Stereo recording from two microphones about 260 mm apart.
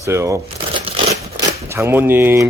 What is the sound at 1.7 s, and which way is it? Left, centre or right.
Speech, centre.